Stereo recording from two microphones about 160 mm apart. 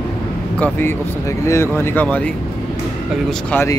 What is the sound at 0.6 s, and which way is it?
Speech, 15° left (ahead or behind).